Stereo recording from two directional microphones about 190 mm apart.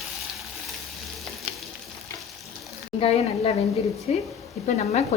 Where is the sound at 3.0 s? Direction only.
30° left (ahead or behind).